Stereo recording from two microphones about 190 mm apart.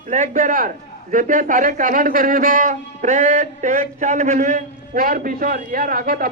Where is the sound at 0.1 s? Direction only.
40° right (ahead or behind).